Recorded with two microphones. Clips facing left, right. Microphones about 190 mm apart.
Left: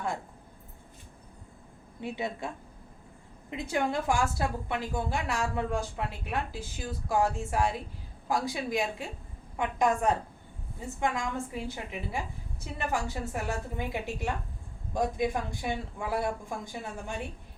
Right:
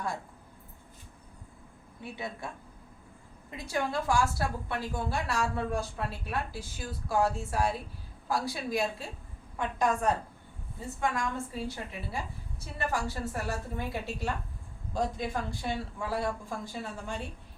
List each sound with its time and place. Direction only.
2.0 s a woman's voice: 20° left (ahead or behind)
3.5 s a woman's voice: 20° left (ahead or behind)